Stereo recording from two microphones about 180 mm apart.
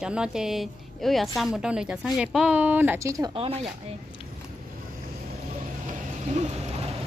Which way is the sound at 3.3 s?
35° right (ahead or behind).